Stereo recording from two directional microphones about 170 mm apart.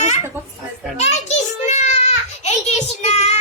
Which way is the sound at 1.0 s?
40° left (ahead or behind).